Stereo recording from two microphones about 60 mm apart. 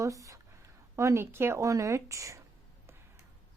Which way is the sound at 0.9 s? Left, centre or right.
Right.